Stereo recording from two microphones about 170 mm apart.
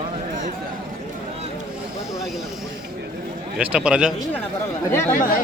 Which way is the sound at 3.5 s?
5° right (ahead or behind).